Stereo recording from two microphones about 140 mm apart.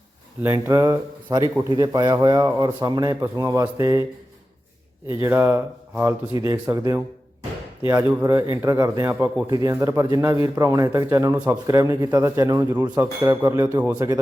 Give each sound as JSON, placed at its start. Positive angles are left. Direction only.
{"t": 0.4, "sound": "speech", "side_deg": -10}
{"t": 0.7, "sound": "speech", "side_deg": -25}
{"t": 5.2, "sound": "speech", "side_deg": -15}
{"t": 9.1, "sound": "speech", "side_deg": -10}
{"t": 9.5, "sound": "speech", "side_deg": -25}